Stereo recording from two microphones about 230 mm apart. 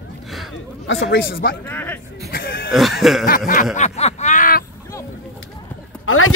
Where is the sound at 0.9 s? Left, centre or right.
Left.